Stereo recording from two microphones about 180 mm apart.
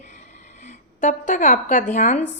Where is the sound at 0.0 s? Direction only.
45° left (ahead or behind).